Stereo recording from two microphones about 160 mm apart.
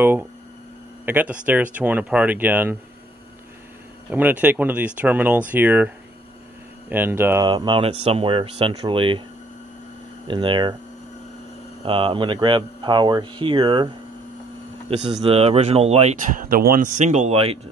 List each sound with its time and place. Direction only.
1.0 s speech: 10° right (ahead or behind)
4.1 s speech: 10° right (ahead or behind)
6.9 s speech: 15° right (ahead or behind)
7.4 s speech: 30° right (ahead or behind)
10.2 s speech: 30° right (ahead or behind)
11.8 s speech: 35° right (ahead or behind)
15.0 s speech: 30° right (ahead or behind)